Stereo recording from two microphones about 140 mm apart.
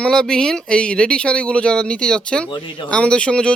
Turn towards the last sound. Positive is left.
turn(degrees=5)  # may be behind; listen again after turning